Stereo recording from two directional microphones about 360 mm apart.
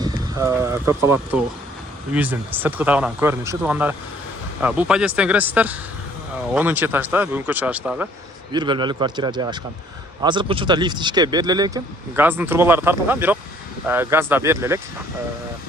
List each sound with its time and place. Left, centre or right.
0.0 s speech: centre